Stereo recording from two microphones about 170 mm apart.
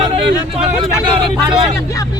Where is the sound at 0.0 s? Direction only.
30° right (ahead or behind).